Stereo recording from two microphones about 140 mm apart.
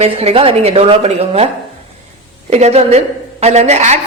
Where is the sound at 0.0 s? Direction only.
45° right (ahead or behind).